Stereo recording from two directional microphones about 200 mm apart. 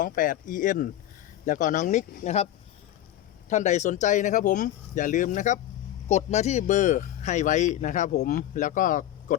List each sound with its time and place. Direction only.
0.0 s speech: 40° left (ahead or behind)
3.5 s speech: 35° left (ahead or behind)